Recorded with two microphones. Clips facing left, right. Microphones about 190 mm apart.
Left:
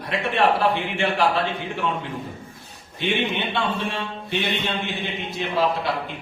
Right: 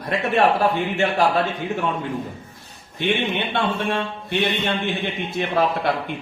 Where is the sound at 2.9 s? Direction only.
55° right (ahead or behind).